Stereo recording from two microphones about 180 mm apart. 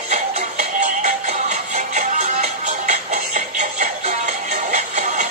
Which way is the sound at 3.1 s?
40° right (ahead or behind).